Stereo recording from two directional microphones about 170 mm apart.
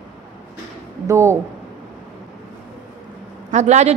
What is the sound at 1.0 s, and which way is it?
Speech, 15° right (ahead or behind).